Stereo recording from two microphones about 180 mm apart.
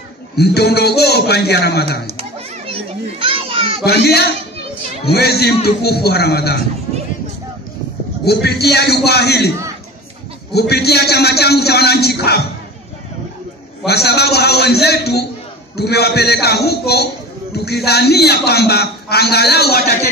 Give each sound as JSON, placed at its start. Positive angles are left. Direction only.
{"t": 0.4, "sound": "a man's voice", "side_deg": 65}
{"t": 2.0, "sound": "children playing", "side_deg": -30}
{"t": 3.8, "sound": "a man's voice", "side_deg": 60}
{"t": 8.3, "sound": "a man's voice", "side_deg": 65}
{"t": 10.5, "sound": "a man's voice", "side_deg": 65}
{"t": 13.8, "sound": "a man's voice", "side_deg": 65}